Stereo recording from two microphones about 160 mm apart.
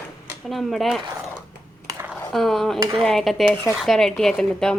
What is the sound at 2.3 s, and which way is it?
Speech, centre (ahead or behind).